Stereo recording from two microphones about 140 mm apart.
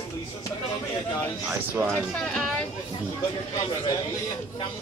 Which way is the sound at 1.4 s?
10° right (ahead or behind).